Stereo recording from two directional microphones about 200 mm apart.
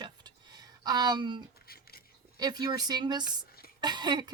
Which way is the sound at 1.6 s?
50° left (ahead or behind).